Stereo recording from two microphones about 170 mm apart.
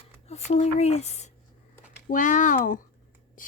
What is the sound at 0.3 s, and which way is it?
Speech, 40° left (ahead or behind).